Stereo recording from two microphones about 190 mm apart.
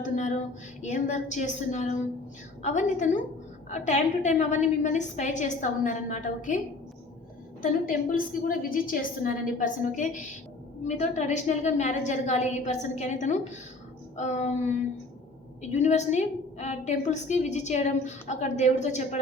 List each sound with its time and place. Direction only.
0.0 s a sound: 40° left (ahead or behind)
0.8 s a woman's voice: 40° left (ahead or behind)
7.6 s a woman's voice: 45° left (ahead or behind)
15.8 s a woman's voice: 35° left (ahead or behind)